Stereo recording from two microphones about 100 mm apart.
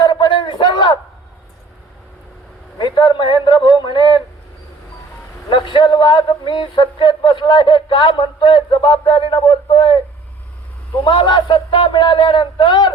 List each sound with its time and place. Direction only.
0.0 s a sound: 50° left (ahead or behind)
2.7 s a man's voice: 45° left (ahead or behind)
5.5 s a man's voice: 55° left (ahead or behind)
11.0 s a man's voice: 55° left (ahead or behind)